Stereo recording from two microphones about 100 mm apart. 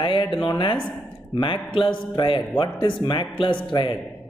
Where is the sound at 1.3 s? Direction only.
55° left (ahead or behind).